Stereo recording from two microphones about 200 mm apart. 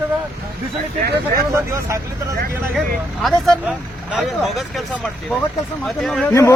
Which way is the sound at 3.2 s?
Centre (ahead or behind).